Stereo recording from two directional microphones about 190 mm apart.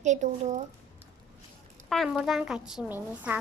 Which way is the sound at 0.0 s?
40° right (ahead or behind).